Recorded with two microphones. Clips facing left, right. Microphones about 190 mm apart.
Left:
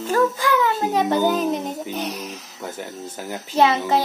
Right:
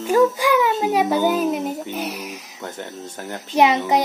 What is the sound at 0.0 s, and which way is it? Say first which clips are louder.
A child's voice: right 3 dB; 10° right (ahead or behind).